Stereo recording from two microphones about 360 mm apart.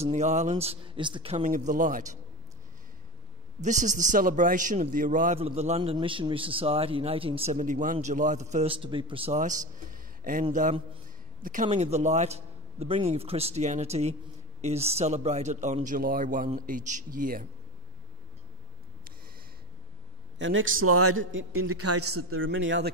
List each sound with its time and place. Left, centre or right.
0.0 s a man's voice: centre
3.6 s a man's voice: right
20.3 s a man's voice: right